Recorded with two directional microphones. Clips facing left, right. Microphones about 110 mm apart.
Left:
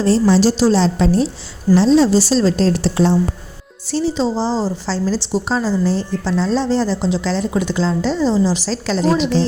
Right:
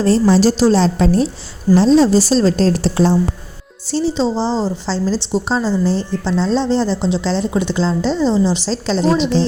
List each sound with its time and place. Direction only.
0.0 s a woman's voice: 45° right (ahead or behind); by 9.5 s 25° right (ahead or behind)